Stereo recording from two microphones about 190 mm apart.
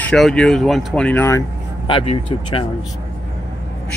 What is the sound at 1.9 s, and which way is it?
Speech, 25° left (ahead or behind).